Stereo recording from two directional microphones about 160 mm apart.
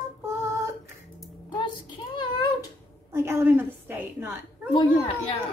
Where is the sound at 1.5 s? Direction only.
30° left (ahead or behind).